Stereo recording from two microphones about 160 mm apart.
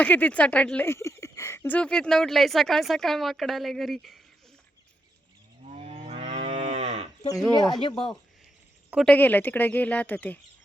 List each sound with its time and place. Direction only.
0.0 s speech: 10° left (ahead or behind)
5.6 s moo: 45° right (ahead or behind)
7.3 s speech: centre (ahead or behind)
9.0 s speech: 10° left (ahead or behind)